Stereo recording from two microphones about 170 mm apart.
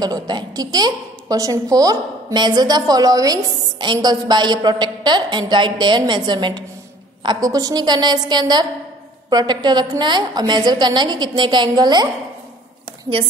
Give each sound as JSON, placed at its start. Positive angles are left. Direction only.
{"t": 0.0, "sound": "a woman's voice", "side_deg": -25}